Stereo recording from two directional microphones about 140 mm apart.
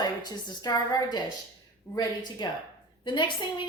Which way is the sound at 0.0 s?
30° left (ahead or behind).